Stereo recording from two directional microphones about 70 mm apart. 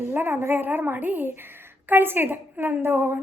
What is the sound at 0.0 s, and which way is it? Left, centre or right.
A woman's voice, right.